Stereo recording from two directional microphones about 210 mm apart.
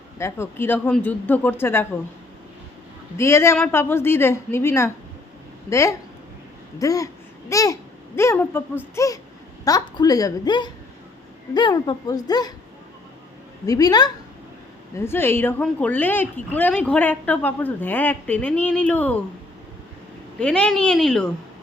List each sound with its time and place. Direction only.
0.2 s a woman's voice: 10° left (ahead or behind)
3.2 s a woman's voice: 15° left (ahead or behind)
13.7 s a woman's voice: 15° left (ahead or behind)
20.4 s a woman's voice: 5° left (ahead or behind)